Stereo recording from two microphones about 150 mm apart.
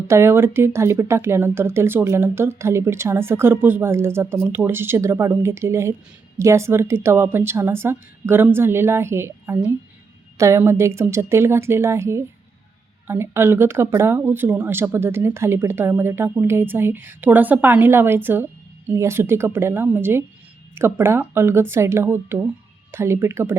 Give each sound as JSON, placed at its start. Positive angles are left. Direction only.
{"t": 0.1, "sound": "speech", "side_deg": -20}